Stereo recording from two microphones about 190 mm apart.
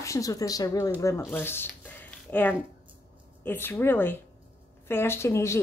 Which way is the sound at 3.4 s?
10° left (ahead or behind).